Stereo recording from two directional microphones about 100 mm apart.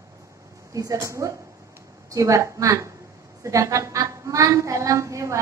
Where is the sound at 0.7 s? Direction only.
35° right (ahead or behind).